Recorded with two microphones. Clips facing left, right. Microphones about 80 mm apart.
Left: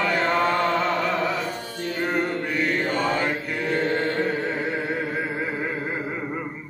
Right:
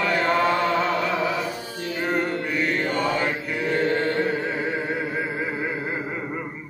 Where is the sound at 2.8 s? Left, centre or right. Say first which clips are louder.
Even; left.